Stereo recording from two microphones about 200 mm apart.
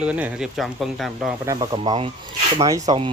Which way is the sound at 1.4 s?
20° right (ahead or behind).